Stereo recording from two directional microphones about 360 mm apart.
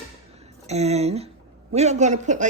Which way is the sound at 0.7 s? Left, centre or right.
Centre.